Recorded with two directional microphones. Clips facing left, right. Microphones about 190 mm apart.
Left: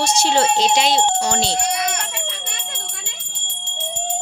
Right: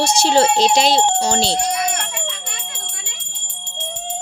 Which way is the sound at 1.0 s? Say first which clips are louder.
Right 2 dB; 25° right (ahead or behind).